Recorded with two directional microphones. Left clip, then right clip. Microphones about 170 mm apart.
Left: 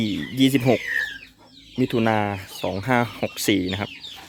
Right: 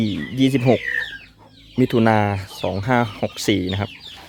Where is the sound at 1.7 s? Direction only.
20° right (ahead or behind).